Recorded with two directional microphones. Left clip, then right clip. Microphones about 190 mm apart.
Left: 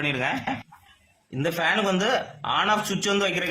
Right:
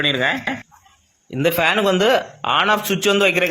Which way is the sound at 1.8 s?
20° right (ahead or behind).